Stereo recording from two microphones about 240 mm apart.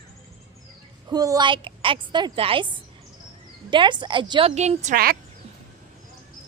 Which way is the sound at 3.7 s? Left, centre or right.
Centre.